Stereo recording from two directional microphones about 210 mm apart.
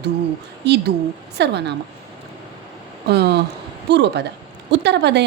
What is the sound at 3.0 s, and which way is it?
A woman's voice, 50° right (ahead or behind).